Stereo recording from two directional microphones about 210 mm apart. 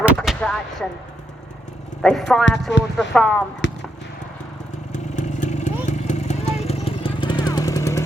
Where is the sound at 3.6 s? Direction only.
60° left (ahead or behind).